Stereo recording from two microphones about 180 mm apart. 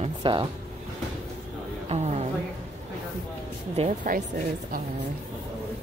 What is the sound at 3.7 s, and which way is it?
Speech, 40° right (ahead or behind).